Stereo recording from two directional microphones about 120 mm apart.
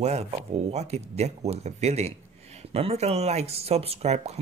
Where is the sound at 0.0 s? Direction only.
65° right (ahead or behind).